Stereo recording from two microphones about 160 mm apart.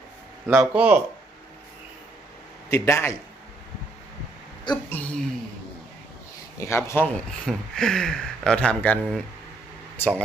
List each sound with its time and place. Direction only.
0.4 s speech: 15° right (ahead or behind)
2.6 s speech: 15° left (ahead or behind)
4.7 s speech: 10° left (ahead or behind)
6.6 s speech: 15° left (ahead or behind)